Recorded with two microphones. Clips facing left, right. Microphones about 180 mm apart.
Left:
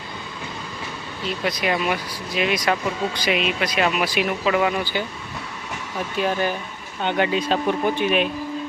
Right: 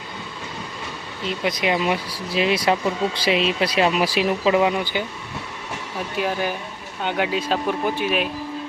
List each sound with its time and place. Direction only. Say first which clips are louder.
1.5 s speech: right 2 dB; 20° right (ahead or behind)
6.1 s speech: left 1 dB; 10° right (ahead or behind)